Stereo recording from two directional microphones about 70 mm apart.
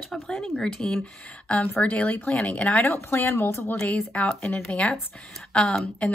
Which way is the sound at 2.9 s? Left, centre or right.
Left.